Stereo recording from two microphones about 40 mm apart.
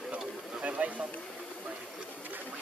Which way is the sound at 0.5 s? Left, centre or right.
Right.